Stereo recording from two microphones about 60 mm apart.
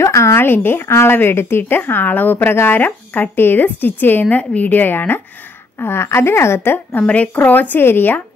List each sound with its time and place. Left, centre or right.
0.0 s a sound: left
0.7 s a woman's voice: left
7.0 s a woman's voice: left